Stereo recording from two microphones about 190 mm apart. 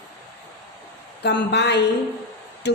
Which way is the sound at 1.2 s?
65° left (ahead or behind).